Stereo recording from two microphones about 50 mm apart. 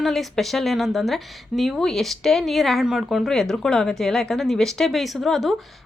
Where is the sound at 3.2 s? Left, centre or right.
Centre.